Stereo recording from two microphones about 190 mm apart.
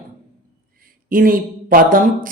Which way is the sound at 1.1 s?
50° right (ahead or behind).